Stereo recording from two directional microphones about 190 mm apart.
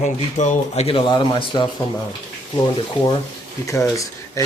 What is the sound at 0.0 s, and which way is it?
Speech, 40° left (ahead or behind).